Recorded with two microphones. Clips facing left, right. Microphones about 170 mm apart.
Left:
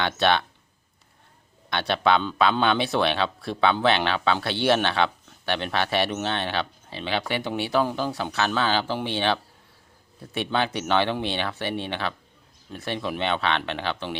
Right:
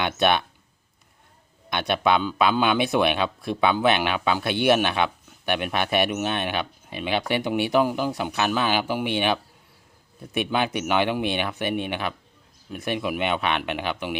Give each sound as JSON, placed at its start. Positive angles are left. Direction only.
{"t": 0.0, "sound": "speech", "side_deg": -15}
{"t": 1.7, "sound": "speech", "side_deg": -15}